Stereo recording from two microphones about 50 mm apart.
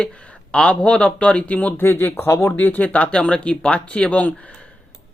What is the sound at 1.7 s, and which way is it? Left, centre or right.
Speech, left.